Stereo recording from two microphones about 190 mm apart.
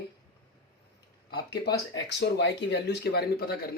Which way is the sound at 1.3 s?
55° left (ahead or behind).